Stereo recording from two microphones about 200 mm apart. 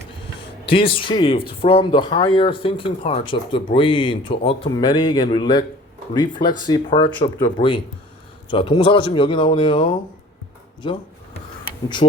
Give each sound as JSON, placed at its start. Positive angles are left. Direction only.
{"t": 0.6, "sound": "speech", "side_deg": 25}